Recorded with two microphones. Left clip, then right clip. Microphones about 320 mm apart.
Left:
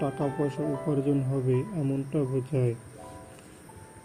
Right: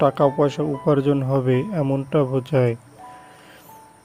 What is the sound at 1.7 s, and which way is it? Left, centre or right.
Speech, right.